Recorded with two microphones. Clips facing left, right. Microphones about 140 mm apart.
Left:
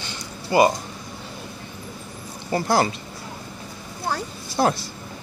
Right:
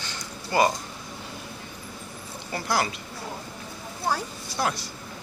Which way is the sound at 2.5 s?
30° left (ahead or behind).